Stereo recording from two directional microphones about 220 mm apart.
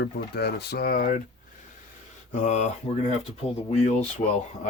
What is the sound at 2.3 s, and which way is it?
Speech, 30° left (ahead or behind).